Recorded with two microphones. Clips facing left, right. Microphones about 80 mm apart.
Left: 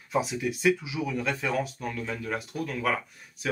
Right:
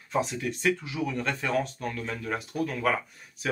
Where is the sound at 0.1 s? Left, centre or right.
Centre.